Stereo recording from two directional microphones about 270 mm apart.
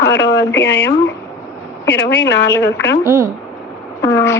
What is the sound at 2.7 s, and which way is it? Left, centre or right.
Speech, left.